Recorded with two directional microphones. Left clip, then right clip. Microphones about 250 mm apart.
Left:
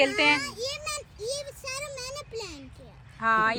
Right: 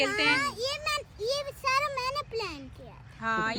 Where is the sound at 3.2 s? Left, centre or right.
Centre.